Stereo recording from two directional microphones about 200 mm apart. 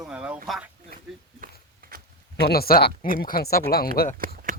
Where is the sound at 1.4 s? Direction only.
45° right (ahead or behind).